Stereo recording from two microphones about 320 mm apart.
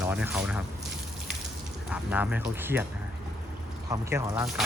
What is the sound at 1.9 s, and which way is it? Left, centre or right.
Speech, centre.